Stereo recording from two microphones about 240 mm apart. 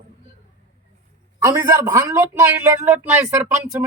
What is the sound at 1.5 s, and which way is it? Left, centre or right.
Speech, centre.